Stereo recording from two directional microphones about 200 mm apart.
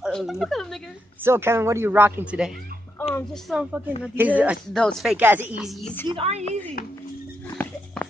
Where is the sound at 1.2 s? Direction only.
10° right (ahead or behind).